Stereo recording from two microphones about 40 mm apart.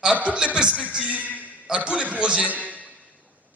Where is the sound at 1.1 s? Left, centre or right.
Right.